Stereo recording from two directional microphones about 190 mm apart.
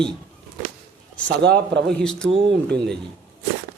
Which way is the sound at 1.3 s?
60° right (ahead or behind).